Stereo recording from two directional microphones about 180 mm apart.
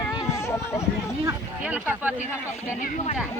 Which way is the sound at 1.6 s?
10° right (ahead or behind).